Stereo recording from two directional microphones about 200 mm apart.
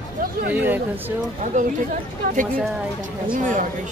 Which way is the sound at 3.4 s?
40° right (ahead or behind).